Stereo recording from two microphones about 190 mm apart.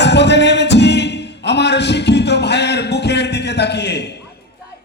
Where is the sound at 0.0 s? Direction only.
65° left (ahead or behind).